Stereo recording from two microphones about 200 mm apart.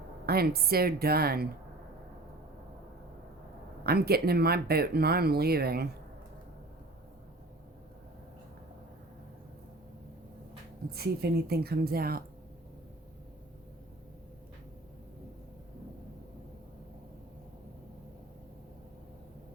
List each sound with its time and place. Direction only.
0.3 s speech: 50° right (ahead or behind)
3.8 s speech: 50° right (ahead or behind)
10.9 s speech: 50° right (ahead or behind)